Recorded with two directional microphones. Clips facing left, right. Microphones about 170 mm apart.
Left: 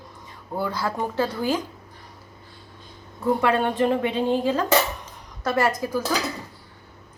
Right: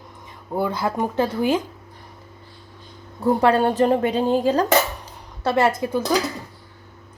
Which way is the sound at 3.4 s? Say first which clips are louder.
Right 5 dB; 35° right (ahead or behind).